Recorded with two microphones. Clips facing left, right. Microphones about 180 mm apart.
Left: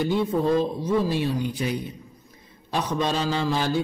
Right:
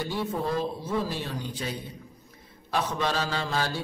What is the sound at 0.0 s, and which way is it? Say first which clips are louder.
A man's voice: left 7 dB; 20° left (ahead or behind).